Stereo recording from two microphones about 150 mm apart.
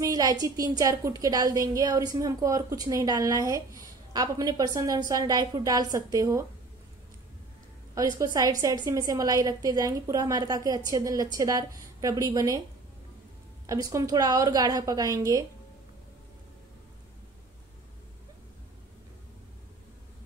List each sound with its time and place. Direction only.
0.0 s a woman's voice: 25° right (ahead or behind)
7.9 s a woman's voice: 25° right (ahead or behind)
13.7 s a woman's voice: 25° right (ahead or behind)